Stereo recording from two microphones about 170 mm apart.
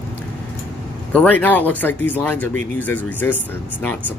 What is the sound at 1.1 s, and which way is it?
Speech, 10° left (ahead or behind).